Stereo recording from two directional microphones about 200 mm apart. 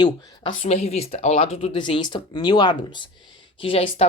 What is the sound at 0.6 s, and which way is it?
Speech, 30° left (ahead or behind).